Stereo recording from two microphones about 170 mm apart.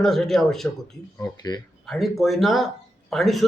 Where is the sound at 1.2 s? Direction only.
25° left (ahead or behind).